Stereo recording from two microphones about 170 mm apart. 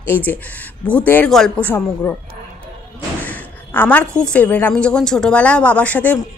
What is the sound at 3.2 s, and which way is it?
A woman's voice, 10° left (ahead or behind).